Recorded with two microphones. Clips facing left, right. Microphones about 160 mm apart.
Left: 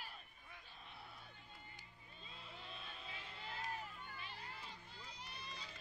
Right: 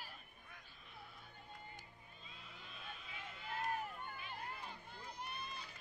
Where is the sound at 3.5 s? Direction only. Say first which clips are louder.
Right 7 dB; 55° right (ahead or behind).